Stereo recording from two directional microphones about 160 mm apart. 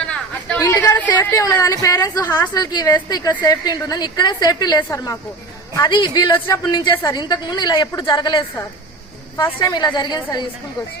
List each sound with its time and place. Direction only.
0.1 s chatter: 5° left (ahead or behind)
0.6 s a woman's voice: 20° left (ahead or behind)